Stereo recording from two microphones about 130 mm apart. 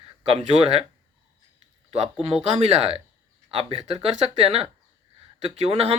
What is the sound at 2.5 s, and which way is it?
Speech, 55° right (ahead or behind).